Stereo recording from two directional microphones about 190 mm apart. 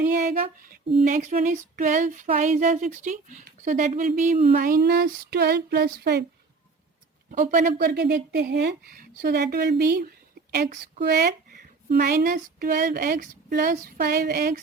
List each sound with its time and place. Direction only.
0.0 s female singing: 40° right (ahead or behind)
1.0 s a sound: 40° right (ahead or behind); by 6.2 s 60° right (ahead or behind)
7.3 s speech: 45° right (ahead or behind)